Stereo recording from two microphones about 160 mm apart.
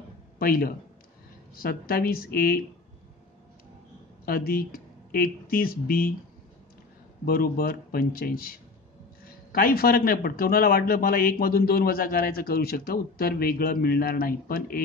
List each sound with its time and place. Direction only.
0.4 s a man's voice: 70° left (ahead or behind)
4.3 s a man's voice: 70° left (ahead or behind)
7.2 s a man's voice: 70° left (ahead or behind)